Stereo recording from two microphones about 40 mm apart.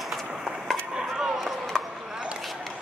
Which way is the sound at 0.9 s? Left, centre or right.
Centre.